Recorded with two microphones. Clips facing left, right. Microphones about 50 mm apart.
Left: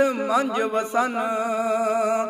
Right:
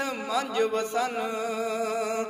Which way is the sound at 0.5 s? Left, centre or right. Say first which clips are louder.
Left 3 dB; centre.